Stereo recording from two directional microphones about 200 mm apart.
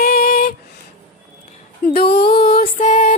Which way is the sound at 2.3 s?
50° left (ahead or behind).